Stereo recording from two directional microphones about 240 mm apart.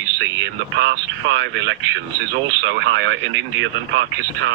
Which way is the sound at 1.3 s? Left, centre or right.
Right.